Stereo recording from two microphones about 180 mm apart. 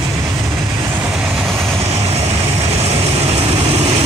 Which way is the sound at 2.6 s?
35° right (ahead or behind).